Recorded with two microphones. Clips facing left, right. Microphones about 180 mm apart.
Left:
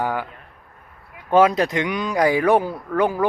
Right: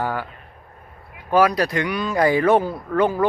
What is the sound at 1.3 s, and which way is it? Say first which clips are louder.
Speech: left 2 dB; 25° left (ahead or behind).